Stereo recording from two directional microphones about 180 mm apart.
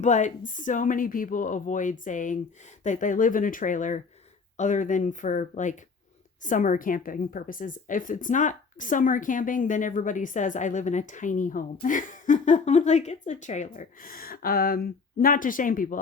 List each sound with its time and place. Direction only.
0.0 s a woman's voice: 40° left (ahead or behind)